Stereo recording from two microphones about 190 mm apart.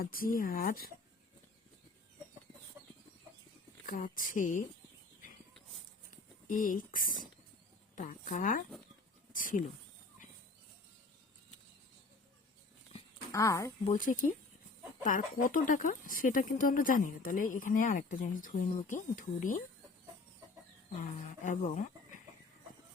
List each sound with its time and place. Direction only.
0.0 s speech: 50° left (ahead or behind)
3.8 s speech: 45° left (ahead or behind)
6.1 s speech: 45° left (ahead or behind)
13.3 s speech: 15° left (ahead or behind)
13.9 s speech: 45° left (ahead or behind)
21.0 s speech: 40° left (ahead or behind)